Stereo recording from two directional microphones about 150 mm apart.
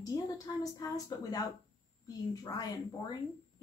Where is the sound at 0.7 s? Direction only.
25° left (ahead or behind).